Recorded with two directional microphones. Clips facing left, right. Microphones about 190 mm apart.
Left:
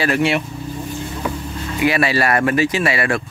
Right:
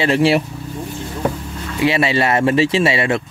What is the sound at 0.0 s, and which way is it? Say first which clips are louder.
Speech: right 3 dB; 30° right (ahead or behind).